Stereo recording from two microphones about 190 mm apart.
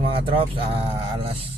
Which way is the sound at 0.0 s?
30° right (ahead or behind).